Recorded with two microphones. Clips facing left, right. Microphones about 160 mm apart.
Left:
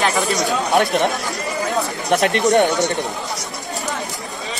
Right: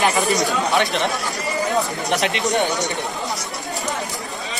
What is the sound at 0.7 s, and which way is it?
Speech, 50° left (ahead or behind).